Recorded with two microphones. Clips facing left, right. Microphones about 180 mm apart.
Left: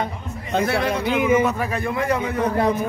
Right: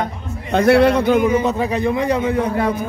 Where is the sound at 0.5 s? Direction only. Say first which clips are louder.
Right 9 dB; 65° right (ahead or behind).